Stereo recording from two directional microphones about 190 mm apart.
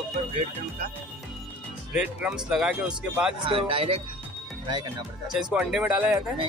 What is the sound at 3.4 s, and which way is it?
Speech, 30° right (ahead or behind).